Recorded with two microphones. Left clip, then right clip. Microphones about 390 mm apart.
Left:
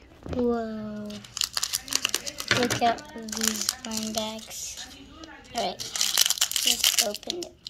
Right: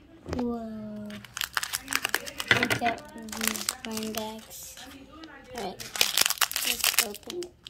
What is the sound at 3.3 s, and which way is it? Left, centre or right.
Speech, centre.